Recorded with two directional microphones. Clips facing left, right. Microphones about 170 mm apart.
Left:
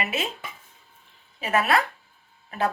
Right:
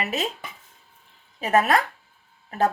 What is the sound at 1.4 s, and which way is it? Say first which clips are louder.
Speech: right 3 dB; 40° right (ahead or behind).